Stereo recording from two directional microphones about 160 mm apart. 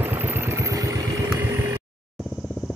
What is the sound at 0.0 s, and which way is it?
Vehicle, 10° right (ahead or behind).